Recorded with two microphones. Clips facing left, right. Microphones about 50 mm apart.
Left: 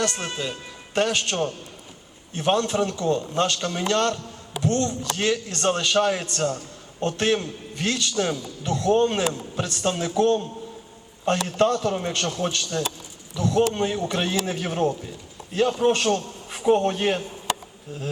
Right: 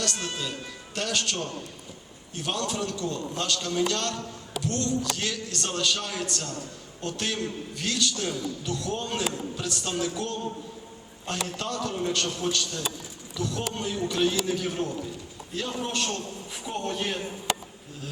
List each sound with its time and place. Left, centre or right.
0.0 s a man's voice: left